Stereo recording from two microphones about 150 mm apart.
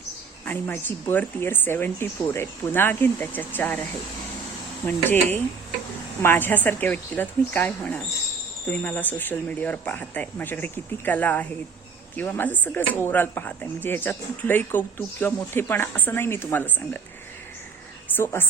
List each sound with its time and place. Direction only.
0.4 s speech: 10° left (ahead or behind)
4.9 s speech: 10° left (ahead or behind)
18.2 s speech: 15° left (ahead or behind)